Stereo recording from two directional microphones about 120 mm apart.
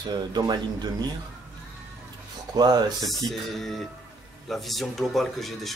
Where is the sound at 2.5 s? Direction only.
35° right (ahead or behind).